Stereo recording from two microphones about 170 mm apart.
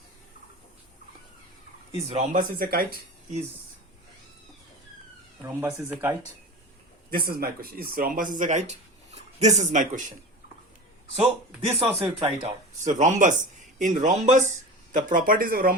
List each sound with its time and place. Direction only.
2.0 s speech: 50° right (ahead or behind)
5.5 s speech: 15° right (ahead or behind)
7.1 s speech: 60° right (ahead or behind)
11.1 s speech: 35° right (ahead or behind); by 15.7 s 60° right (ahead or behind)